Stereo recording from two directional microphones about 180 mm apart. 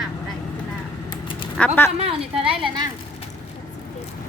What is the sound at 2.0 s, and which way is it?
Speech, 35° right (ahead or behind).